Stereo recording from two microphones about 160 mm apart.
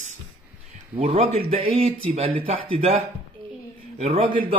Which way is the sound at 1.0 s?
40° right (ahead or behind).